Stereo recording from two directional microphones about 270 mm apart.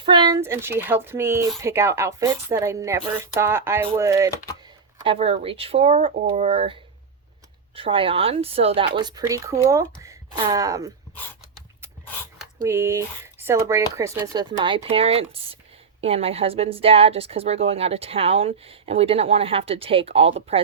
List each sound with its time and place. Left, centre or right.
0.0 s speech: centre
5.0 s a woman's voice: right
7.8 s a woman's voice: centre
12.6 s a woman's voice: centre